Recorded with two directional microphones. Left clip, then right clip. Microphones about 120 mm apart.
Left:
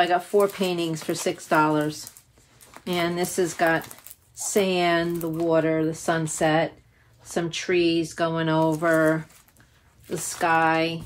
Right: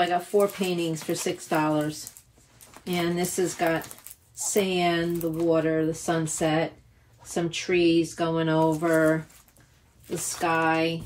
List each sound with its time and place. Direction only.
0.0 s speech: 25° left (ahead or behind)
10.0 s speech: 25° left (ahead or behind)